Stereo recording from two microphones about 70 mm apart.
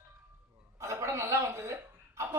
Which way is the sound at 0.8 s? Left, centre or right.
Right.